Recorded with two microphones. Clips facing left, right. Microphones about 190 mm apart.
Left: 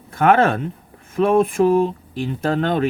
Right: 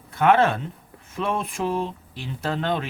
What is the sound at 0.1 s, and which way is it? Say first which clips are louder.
Speech: left 3 dB; 50° left (ahead or behind).